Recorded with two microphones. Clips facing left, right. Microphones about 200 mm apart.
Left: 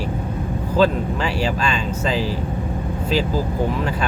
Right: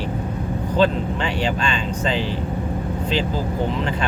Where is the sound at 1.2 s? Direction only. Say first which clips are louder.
Left 1 dB; 30° right (ahead or behind).